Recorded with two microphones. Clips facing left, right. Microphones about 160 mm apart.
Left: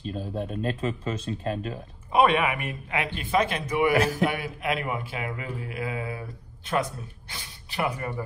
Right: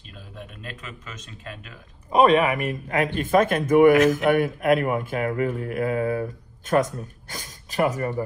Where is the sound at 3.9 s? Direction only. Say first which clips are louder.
Right 6 dB; 35° left (ahead or behind).